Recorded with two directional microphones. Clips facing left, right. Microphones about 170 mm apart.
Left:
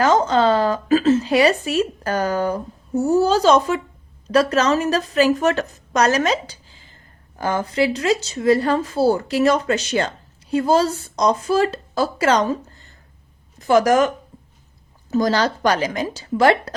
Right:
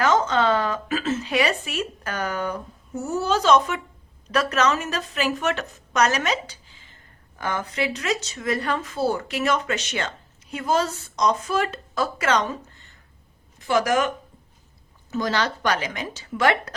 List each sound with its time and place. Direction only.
0.0 s a woman's voice: 35° left (ahead or behind)
15.1 s a woman's voice: 35° left (ahead or behind)